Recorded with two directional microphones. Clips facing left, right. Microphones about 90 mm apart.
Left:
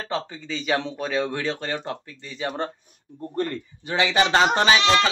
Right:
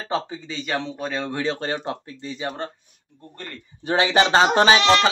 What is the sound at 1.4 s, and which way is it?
Speech, 25° right (ahead or behind).